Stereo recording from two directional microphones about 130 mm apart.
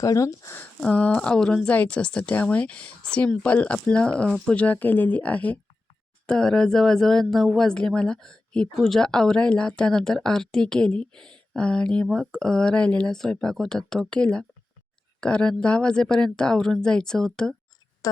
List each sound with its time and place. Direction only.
0.0 s speech: 25° left (ahead or behind)
0.8 s speech: 10° left (ahead or behind)
18.0 s speech: 25° left (ahead or behind)